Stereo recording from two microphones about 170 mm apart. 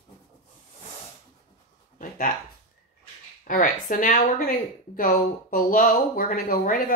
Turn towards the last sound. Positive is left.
turn(degrees=55)  # may be behind; listen again after turning